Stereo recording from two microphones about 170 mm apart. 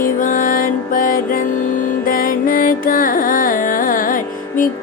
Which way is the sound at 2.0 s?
55° left (ahead or behind).